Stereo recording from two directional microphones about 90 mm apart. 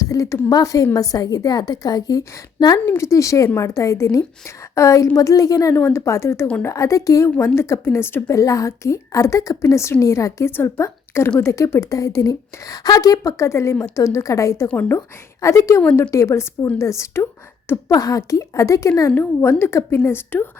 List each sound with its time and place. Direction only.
0.0 s a sound: 40° left (ahead or behind)
0.5 s a woman's voice: 40° left (ahead or behind)
3.0 s a woman's voice: 35° left (ahead or behind)
5.7 s a woman's voice: 30° left (ahead or behind)
8.4 s a woman's voice: 40° left (ahead or behind)
14.7 s a woman's voice: 20° left (ahead or behind)
14.9 s a woman's voice: 35° left (ahead or behind)
19.4 s a woman's voice: 25° left (ahead or behind)